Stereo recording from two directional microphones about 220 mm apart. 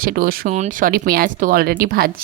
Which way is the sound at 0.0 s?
40° right (ahead or behind).